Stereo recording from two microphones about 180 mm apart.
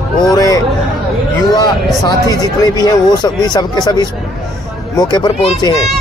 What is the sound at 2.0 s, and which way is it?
Speech, 20° left (ahead or behind).